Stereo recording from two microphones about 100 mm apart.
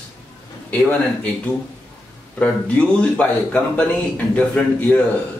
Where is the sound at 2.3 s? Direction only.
10° left (ahead or behind).